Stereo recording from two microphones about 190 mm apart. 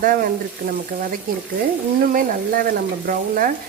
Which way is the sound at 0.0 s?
45° right (ahead or behind).